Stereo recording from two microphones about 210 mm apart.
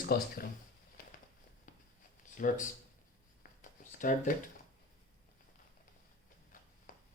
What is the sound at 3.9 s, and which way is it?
Speech, 40° left (ahead or behind).